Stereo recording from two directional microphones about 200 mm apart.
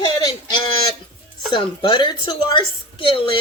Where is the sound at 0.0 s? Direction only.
20° left (ahead or behind).